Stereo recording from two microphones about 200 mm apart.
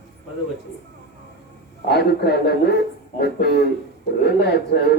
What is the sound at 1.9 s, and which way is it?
Speech, 55° left (ahead or behind).